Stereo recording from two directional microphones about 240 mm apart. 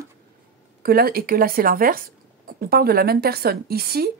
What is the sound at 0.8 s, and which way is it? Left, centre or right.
Speech, right.